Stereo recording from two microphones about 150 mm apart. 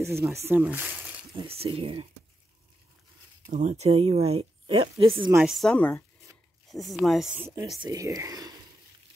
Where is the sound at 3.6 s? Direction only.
45° right (ahead or behind).